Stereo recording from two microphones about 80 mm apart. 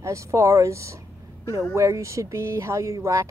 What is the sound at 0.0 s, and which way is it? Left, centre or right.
Speech, right.